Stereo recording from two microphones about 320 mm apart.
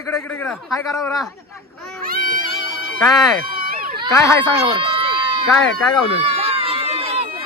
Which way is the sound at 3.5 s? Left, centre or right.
Right.